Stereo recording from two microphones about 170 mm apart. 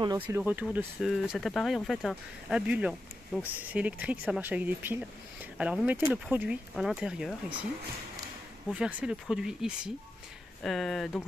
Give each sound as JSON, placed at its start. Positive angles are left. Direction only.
{"t": 0.0, "sound": "speech", "side_deg": -20}
{"t": 0.4, "sound": "speech", "side_deg": -10}
{"t": 8.7, "sound": "speech", "side_deg": -5}